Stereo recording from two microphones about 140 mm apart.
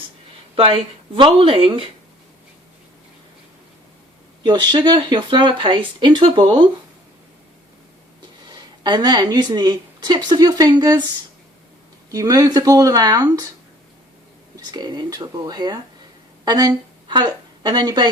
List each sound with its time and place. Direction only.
0.5 s speech: 40° right (ahead or behind)
4.4 s speech: 30° right (ahead or behind)
8.4 s speech: 30° right (ahead or behind)
12.1 s speech: 25° right (ahead or behind)
14.5 s a woman's voice: 30° right (ahead or behind)